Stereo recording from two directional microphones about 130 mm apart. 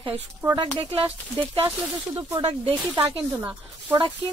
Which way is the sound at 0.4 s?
15° right (ahead or behind).